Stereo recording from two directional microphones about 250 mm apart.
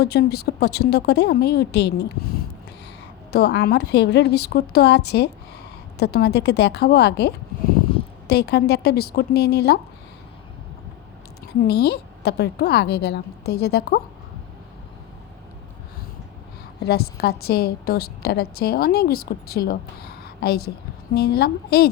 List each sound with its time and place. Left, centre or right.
0.0 s a woman's voice: left
3.3 s a woman's voice: left
11.7 s a woman's voice: left
16.8 s a woman's voice: left